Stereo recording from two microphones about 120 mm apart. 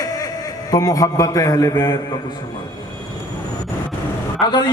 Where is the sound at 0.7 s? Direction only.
30° left (ahead or behind).